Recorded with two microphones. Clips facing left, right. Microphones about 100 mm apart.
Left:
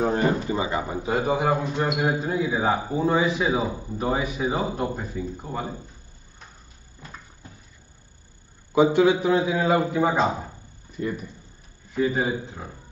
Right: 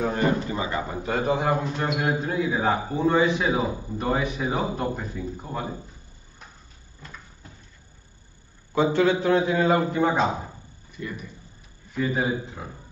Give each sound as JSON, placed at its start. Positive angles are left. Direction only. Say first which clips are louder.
{"t": 0.5, "sound": "a man's voice", "louder": "left 2 dB", "side_deg": 15}
{"t": 1.0, "sound": "a man's voice", "louder": "left 1 dB", "side_deg": 5}
{"t": 8.7, "sound": "a man's voice", "louder": "left 3 dB", "side_deg": 10}
{"t": 11.0, "sound": "speech", "louder": "left 6 dB", "side_deg": 35}
{"t": 11.9, "sound": "a man's voice", "louder": "left 2 dB", "side_deg": 0}